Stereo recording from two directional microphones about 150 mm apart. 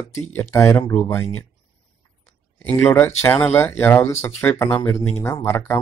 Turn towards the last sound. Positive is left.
turn(degrees=15)  # may be behind; listen again after turning